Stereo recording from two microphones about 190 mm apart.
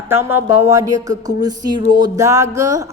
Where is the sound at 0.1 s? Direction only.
10° right (ahead or behind).